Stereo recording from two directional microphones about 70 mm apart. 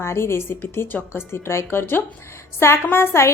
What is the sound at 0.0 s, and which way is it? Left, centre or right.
Speech, left.